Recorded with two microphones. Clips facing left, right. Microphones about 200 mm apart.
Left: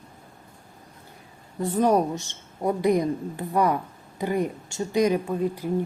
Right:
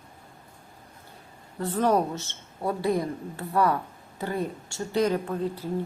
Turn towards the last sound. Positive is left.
turn(degrees=15)  # may be behind; listen again after turning